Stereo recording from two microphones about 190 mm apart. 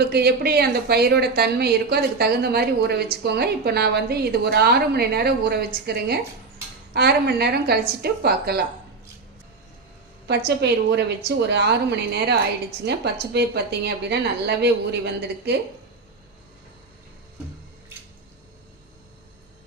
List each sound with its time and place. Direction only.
0.0 s speech: 55° right (ahead or behind)
10.2 s speech: 60° right (ahead or behind)